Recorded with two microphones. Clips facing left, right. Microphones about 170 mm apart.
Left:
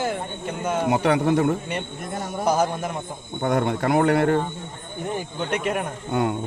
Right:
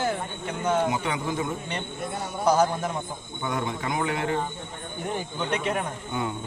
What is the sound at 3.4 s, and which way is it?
Speech, 60° left (ahead or behind).